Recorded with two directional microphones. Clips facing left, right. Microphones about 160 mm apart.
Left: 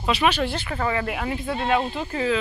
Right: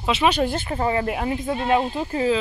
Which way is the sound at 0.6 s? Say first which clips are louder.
Right 3 dB; 30° right (ahead or behind).